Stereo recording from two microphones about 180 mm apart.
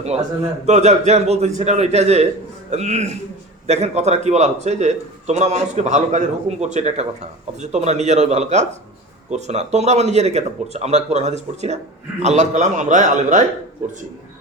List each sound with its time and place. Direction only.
0.6 s a man's voice: 40° right (ahead or behind)